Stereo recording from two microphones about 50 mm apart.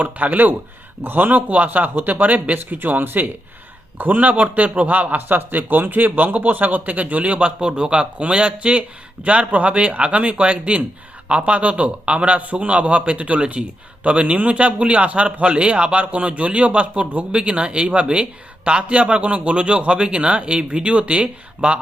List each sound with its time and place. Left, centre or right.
0.0 s a man's voice: right